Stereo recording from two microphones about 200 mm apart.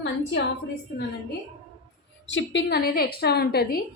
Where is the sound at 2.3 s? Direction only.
65° left (ahead or behind).